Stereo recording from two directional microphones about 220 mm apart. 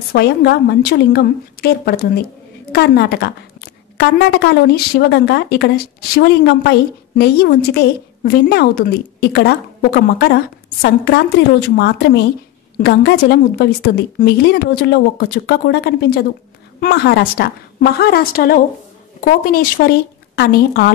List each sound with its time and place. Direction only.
0.1 s a woman's voice: 50° left (ahead or behind)